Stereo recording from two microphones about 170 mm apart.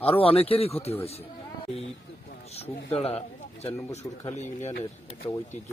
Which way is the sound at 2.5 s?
35° left (ahead or behind).